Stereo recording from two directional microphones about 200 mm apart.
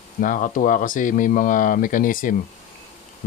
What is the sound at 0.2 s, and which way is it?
Speech, 40° left (ahead or behind).